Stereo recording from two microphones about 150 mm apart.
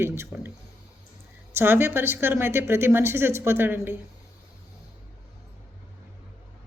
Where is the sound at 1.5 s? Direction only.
15° right (ahead or behind).